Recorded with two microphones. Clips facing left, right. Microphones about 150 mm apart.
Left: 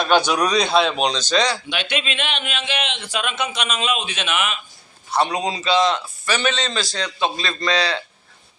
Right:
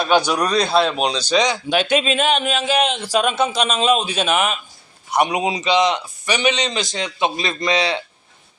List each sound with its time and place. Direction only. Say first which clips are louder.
0.0 s a man's voice: even; 5° right (ahead or behind)
1.7 s speech: right 8 dB; 40° right (ahead or behind)
5.1 s a man's voice: right 2 dB; 15° right (ahead or behind)